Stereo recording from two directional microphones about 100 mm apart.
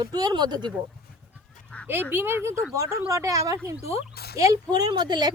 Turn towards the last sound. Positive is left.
turn(degrees=-45)  # may be behind; listen again after turning